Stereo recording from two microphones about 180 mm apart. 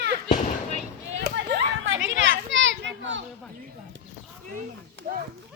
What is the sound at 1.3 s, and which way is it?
Children playing, 75° right (ahead or behind).